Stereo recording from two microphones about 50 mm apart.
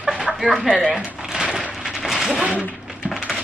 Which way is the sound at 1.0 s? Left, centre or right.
Right.